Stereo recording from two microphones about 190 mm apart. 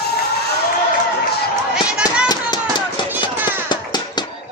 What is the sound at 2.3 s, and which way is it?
Run, 20° left (ahead or behind).